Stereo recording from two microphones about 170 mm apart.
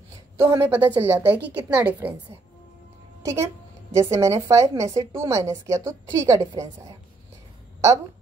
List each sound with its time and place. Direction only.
0.4 s a woman's voice: 15° right (ahead or behind)
3.2 s a woman's voice: 20° right (ahead or behind)